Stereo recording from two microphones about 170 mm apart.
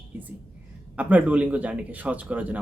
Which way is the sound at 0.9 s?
10° right (ahead or behind).